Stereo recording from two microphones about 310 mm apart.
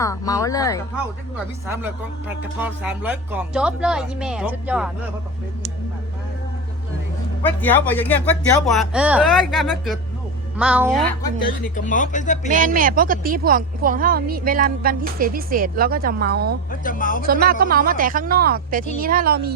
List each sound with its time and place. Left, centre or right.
0.0 s speech: centre
1.6 s speech: centre
7.4 s speech: centre
11.9 s speech: left
12.5 s a woman's voice: right
16.8 s speech: left
17.2 s a woman's voice: right